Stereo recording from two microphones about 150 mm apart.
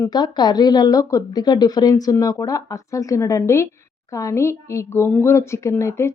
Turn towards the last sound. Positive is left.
turn(degrees=20)  # may be behind; listen again after turning